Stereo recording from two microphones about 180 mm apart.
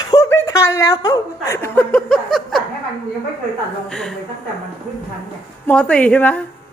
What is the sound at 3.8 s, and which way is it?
Speech, 5° left (ahead or behind).